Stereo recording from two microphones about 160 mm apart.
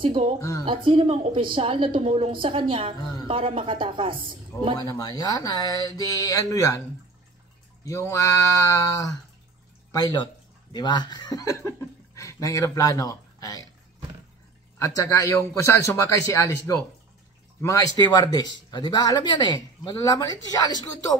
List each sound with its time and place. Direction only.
0.0 s a woman's voice: 40° right (ahead or behind)
0.4 s speech: 20° left (ahead or behind)
0.8 s a woman's voice: 35° right (ahead or behind)
4.8 s speech: 20° left (ahead or behind)
7.8 s speech: 20° left (ahead or behind)
14.9 s speech: 20° left (ahead or behind)